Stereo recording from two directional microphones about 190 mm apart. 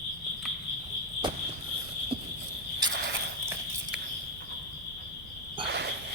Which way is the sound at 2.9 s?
60° right (ahead or behind).